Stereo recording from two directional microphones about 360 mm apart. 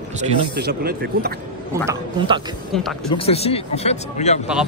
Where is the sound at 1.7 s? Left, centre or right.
Centre.